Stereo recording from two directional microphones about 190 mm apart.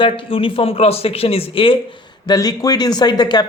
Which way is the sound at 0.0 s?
30° left (ahead or behind).